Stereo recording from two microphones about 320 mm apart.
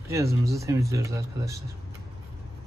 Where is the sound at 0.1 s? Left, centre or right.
Centre.